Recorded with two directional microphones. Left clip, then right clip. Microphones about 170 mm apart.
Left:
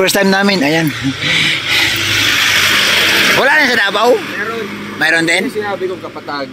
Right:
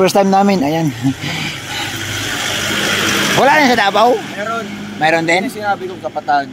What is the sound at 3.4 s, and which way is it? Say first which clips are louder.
Speech: even; 5° right (ahead or behind).